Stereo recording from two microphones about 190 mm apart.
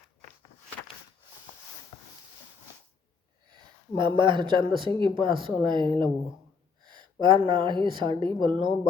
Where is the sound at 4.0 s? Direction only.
25° right (ahead or behind).